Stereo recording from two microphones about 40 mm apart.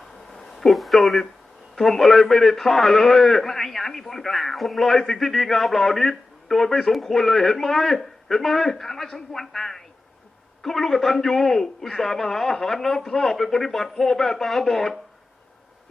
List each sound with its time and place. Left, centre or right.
0.3 s a man's voice: centre
13.1 s a man's voice: centre